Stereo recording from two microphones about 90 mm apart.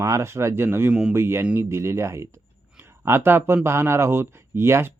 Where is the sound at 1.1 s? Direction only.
30° right (ahead or behind).